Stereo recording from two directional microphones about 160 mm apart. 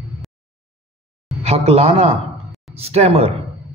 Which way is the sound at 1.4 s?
40° right (ahead or behind).